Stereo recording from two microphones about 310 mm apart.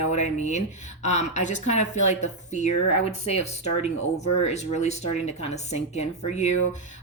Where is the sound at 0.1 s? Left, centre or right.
Left.